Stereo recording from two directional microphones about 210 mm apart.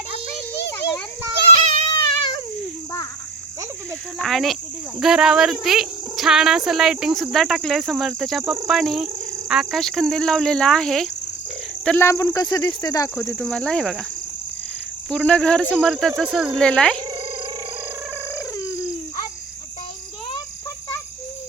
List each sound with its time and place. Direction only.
1.9 s a sound: 20° left (ahead or behind)
4.2 s speech: centre (ahead or behind)
11.9 s speech: 10° left (ahead or behind)
15.1 s speech: 5° left (ahead or behind)
18.3 s fowl: 15° left (ahead or behind)